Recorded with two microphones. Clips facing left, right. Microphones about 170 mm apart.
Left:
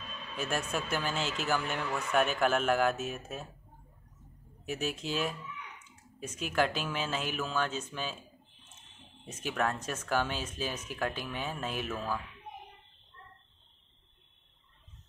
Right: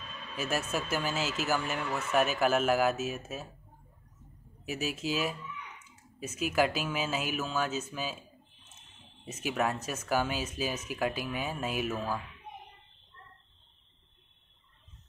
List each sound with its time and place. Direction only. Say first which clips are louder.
0.4 s speech: right 1 dB; 5° right (ahead or behind)
4.6 s speech: right 1 dB; 5° right (ahead or behind)
9.2 s speech: right 1 dB; 10° right (ahead or behind)